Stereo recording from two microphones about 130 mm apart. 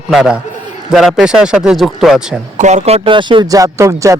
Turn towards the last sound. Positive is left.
turn(degrees=-25)  # may be behind; listen again after turning